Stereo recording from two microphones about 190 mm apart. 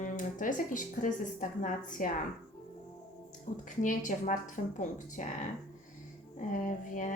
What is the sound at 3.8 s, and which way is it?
Speech, 40° left (ahead or behind).